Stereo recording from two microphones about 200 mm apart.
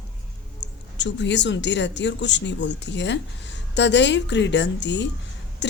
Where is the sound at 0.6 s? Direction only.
60° left (ahead or behind).